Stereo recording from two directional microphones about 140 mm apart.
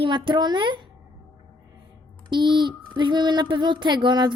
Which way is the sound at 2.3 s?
35° right (ahead or behind).